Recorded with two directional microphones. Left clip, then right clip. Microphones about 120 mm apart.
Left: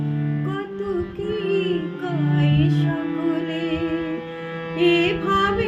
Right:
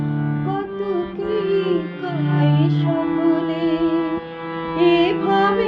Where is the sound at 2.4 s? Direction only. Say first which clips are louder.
Right 4 dB; 15° left (ahead or behind).